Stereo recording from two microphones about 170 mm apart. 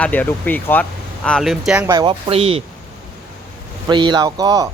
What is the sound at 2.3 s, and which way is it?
Speech, 35° right (ahead or behind).